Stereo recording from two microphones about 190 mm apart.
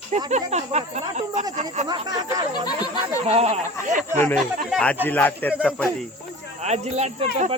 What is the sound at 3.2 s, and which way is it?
Speech, 35° right (ahead or behind).